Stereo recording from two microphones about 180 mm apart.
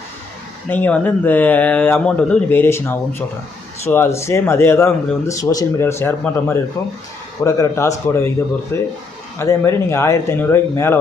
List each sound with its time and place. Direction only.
0.7 s speech: 10° left (ahead or behind)